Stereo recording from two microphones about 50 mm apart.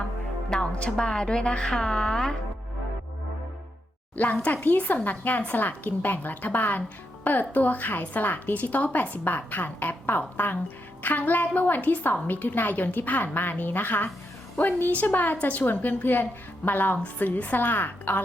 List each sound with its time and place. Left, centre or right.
0.5 s music: centre
0.9 s speech: centre
4.1 s a woman's voice: left